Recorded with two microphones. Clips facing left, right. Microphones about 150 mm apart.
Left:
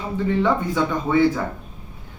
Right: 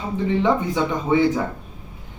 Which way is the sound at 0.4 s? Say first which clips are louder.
Right 1 dB; 20° right (ahead or behind).